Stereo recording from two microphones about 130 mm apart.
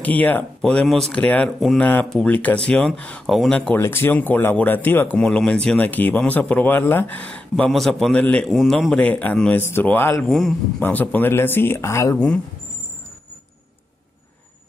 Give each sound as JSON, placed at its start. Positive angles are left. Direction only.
{"t": 0.0, "sound": "speech", "side_deg": 10}
{"t": 10.2, "sound": "a man's voice", "side_deg": 0}
{"t": 10.8, "sound": "speech", "side_deg": 10}